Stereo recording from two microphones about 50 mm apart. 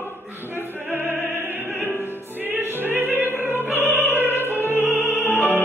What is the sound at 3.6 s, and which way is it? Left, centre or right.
Opera, right.